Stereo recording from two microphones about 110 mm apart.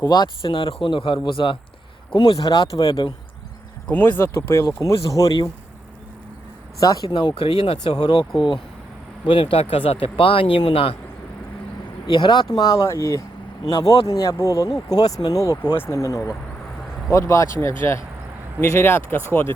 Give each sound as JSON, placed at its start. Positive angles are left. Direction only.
{"t": 0.4, "sound": "speech", "side_deg": 50}
{"t": 3.9, "sound": "speech", "side_deg": 20}
{"t": 6.7, "sound": "speech", "side_deg": 35}
{"t": 12.0, "sound": "speech", "side_deg": 45}
{"t": 13.7, "sound": "speech", "side_deg": 40}